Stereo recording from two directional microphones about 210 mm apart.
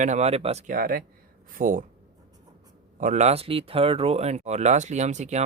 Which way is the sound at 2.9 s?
35° right (ahead or behind).